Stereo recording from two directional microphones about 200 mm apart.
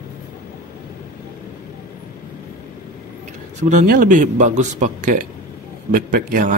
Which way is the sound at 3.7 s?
45° right (ahead or behind).